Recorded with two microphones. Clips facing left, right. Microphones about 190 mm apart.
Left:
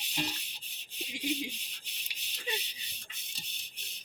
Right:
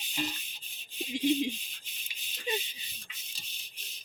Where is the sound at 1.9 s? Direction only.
75° left (ahead or behind).